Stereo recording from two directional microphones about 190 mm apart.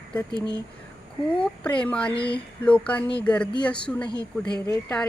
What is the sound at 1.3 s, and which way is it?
A woman's voice, 5° left (ahead or behind).